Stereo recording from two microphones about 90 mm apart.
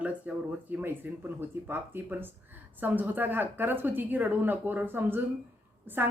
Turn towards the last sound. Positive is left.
turn(degrees=-20)  # may be behind; listen again after turning